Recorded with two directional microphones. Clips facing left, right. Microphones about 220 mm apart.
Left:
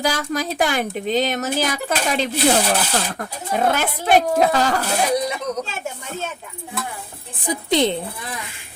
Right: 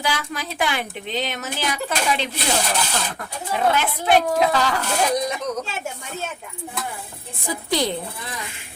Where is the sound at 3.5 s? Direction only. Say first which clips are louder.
Left 1 dB; 45° left (ahead or behind).